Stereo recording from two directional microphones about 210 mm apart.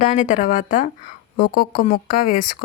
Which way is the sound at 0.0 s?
35° left (ahead or behind).